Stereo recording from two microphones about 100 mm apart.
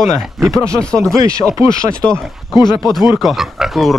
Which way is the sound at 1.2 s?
35° right (ahead or behind).